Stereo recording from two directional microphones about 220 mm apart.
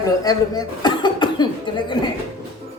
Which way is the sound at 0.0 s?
15° left (ahead or behind).